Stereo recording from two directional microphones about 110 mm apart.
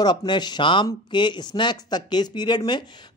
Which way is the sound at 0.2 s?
40° left (ahead or behind).